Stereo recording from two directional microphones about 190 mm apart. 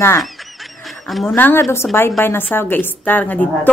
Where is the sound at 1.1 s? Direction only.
Centre (ahead or behind).